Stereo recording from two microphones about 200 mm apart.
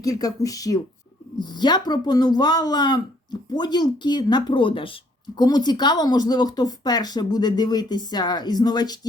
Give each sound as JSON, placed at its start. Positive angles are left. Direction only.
{"t": 0.0, "sound": "speech", "side_deg": 15}